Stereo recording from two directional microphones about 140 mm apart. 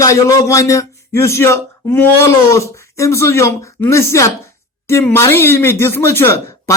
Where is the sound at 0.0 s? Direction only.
25° left (ahead or behind).